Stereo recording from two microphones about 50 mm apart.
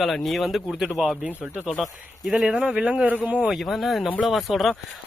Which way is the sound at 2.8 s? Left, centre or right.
Right.